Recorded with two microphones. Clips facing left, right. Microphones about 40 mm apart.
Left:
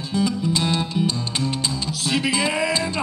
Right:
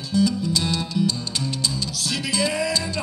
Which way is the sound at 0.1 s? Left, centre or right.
Left.